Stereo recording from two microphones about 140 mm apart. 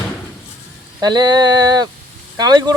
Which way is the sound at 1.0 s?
30° right (ahead or behind).